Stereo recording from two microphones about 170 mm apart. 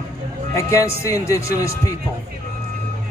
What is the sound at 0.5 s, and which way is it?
A man's voice, 15° left (ahead or behind).